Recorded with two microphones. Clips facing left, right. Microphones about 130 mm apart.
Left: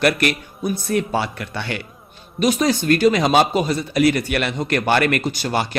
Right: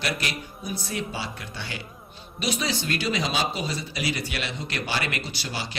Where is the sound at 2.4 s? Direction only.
45° left (ahead or behind).